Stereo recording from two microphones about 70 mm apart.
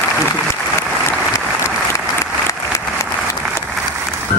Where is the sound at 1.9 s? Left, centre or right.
Left.